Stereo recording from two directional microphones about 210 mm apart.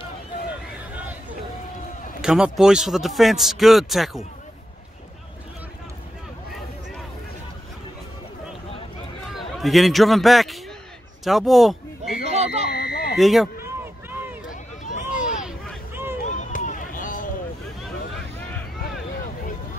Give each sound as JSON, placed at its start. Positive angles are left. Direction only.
{"t": 2.2, "sound": "speech", "side_deg": -5}
{"t": 9.6, "sound": "speech", "side_deg": 0}
{"t": 12.6, "sound": "a sound", "side_deg": 50}
{"t": 13.1, "sound": "speech", "side_deg": 0}
{"t": 14.5, "sound": "run", "side_deg": 35}
{"t": 15.4, "sound": "vehicle", "side_deg": -10}
{"t": 16.3, "sound": "run", "side_deg": 35}